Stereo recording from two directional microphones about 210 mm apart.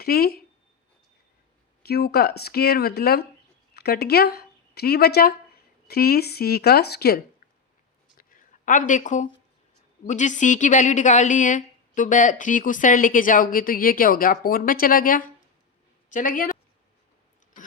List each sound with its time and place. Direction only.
0.0 s speech: 45° left (ahead or behind)
1.9 s speech: 50° left (ahead or behind)
8.2 s a sound: 40° left (ahead or behind)
10.1 s a woman's voice: 35° left (ahead or behind)